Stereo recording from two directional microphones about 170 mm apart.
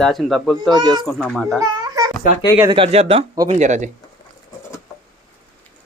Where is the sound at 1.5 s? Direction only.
20° right (ahead or behind).